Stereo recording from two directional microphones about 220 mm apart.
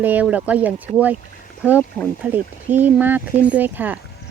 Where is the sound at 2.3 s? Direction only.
10° right (ahead or behind).